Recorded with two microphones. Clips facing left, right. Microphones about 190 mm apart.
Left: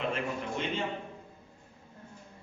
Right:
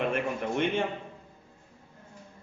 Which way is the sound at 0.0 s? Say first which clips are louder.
Right 4 dB; 60° right (ahead or behind).